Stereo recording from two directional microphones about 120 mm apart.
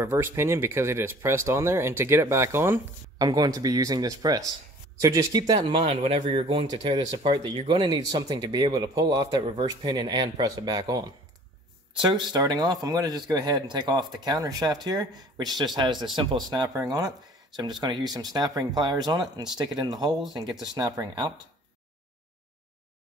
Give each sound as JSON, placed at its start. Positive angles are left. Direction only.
{"t": 0.0, "sound": "speech", "side_deg": -20}
{"t": 3.2, "sound": "speech", "side_deg": -30}
{"t": 5.6, "sound": "speech", "side_deg": -50}